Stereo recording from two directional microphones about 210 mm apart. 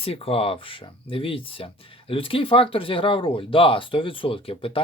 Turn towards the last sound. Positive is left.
turn(degrees=25)  # may be behind; listen again after turning